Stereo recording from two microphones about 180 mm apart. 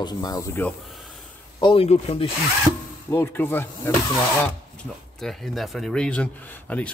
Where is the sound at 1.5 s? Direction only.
30° left (ahead or behind).